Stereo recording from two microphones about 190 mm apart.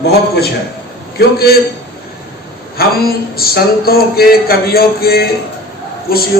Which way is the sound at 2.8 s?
55° left (ahead or behind).